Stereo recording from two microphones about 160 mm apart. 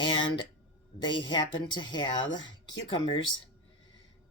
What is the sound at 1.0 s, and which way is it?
Speech, 30° left (ahead or behind).